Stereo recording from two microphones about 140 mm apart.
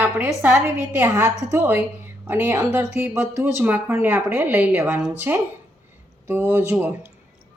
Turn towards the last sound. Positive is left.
turn(degrees=-15)  # may be behind; listen again after turning